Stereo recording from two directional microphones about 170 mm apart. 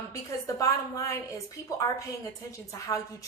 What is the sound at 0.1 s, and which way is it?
Speech, 20° left (ahead or behind).